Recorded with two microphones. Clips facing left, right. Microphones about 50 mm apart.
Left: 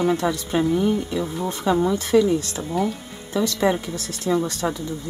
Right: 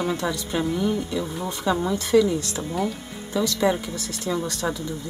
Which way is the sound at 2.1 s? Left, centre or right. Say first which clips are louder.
Even; left.